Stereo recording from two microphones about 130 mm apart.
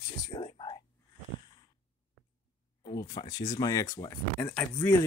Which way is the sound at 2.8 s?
30° left (ahead or behind).